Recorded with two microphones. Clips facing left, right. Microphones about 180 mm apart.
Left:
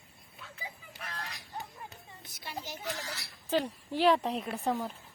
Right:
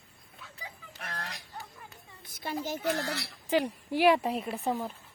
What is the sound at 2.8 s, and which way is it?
Speech, 65° right (ahead or behind).